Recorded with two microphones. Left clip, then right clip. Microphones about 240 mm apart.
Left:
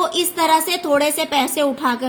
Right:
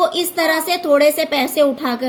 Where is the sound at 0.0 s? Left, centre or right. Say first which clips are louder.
Right 2 dB; centre.